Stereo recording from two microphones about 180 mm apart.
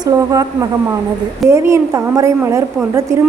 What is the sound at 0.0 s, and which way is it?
A woman's voice, 20° right (ahead or behind).